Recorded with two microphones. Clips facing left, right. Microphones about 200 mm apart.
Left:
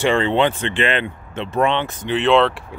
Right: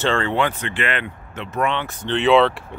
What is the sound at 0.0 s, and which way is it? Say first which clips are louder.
Speech: left 4 dB; 15° left (ahead or behind).